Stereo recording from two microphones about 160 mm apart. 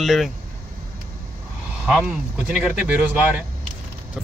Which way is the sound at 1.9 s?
5° right (ahead or behind).